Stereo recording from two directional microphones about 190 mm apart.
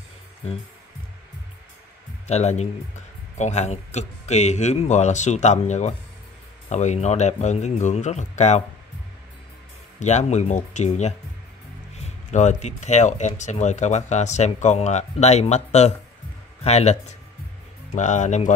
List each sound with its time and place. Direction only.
2.2 s speech: 35° left (ahead or behind)
9.9 s speech: 35° left (ahead or behind)
12.3 s speech: 40° left (ahead or behind)